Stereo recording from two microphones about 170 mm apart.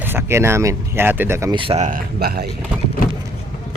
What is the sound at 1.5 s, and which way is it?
Speech, 35° right (ahead or behind).